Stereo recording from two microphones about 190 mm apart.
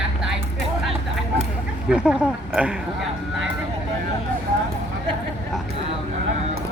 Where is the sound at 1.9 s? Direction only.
5° right (ahead or behind).